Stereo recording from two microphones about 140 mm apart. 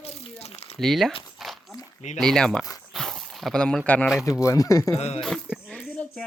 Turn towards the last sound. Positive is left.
turn(degrees=5)  # may be behind; listen again after turning